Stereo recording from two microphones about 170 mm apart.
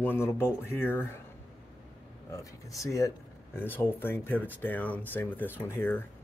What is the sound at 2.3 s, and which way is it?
Speech, 20° left (ahead or behind).